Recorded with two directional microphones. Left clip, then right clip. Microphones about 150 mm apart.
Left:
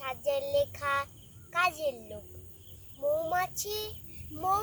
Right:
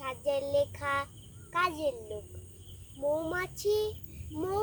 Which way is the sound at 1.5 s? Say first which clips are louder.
Left 1 dB; 20° right (ahead or behind).